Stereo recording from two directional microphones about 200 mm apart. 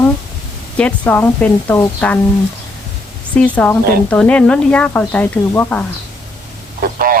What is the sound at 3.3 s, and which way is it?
Speech, 5° left (ahead or behind).